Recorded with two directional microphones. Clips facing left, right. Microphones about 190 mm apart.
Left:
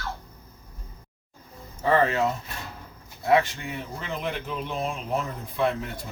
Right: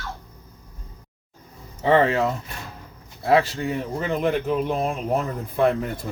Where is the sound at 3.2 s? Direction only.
35° right (ahead or behind).